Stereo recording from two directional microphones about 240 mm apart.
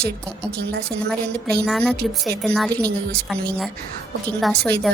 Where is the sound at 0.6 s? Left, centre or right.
Right.